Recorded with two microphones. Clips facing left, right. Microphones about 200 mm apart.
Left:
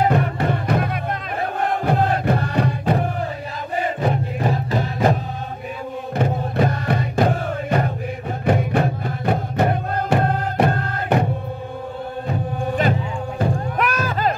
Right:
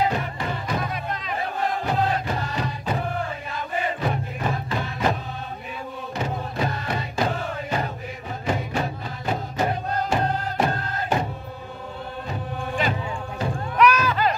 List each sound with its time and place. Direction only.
0.1 s music: 55° left (ahead or behind)
1.6 s chant: 55° left (ahead or behind)
4.4 s music: 40° left (ahead or behind)
6.1 s music: 55° left (ahead or behind)
13.4 s music: 50° left (ahead or behind)